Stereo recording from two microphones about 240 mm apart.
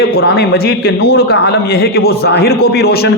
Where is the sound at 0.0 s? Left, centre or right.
Left.